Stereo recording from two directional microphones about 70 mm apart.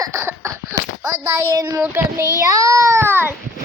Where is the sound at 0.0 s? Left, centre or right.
Right.